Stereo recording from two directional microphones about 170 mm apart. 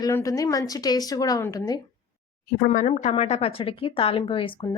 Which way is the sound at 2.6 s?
50° left (ahead or behind).